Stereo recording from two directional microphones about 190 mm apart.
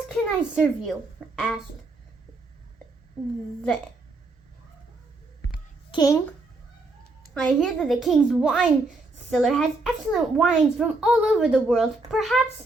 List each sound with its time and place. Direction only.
0.1 s a woman's voice: centre (ahead or behind)
5.9 s a child's voice: 20° left (ahead or behind)
7.3 s a woman's voice: centre (ahead or behind)